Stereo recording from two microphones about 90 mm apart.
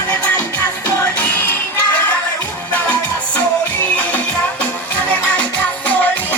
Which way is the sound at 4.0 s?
15° left (ahead or behind).